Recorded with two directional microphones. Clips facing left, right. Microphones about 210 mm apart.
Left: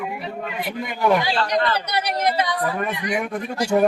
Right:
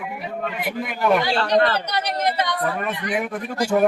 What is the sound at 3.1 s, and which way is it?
Speech, 5° right (ahead or behind).